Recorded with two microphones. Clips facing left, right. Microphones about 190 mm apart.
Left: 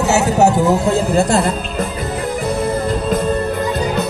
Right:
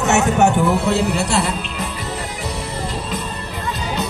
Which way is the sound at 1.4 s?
55° left (ahead or behind).